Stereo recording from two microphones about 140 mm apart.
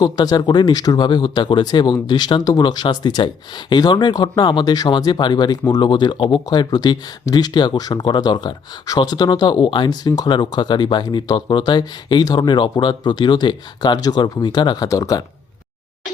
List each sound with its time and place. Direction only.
0.0 s speech: 30° left (ahead or behind)